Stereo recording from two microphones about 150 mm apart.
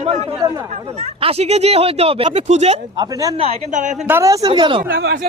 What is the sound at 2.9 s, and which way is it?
Speech, 25° right (ahead or behind).